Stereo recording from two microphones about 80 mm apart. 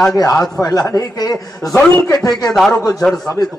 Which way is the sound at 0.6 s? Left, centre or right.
Left.